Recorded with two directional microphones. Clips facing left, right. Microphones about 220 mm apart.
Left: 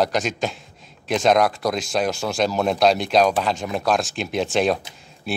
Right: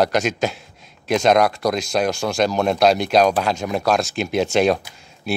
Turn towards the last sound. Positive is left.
turn(degrees=0)  # may be behind; listen again after turning